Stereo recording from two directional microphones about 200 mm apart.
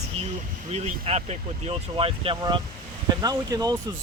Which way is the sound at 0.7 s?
30° right (ahead or behind).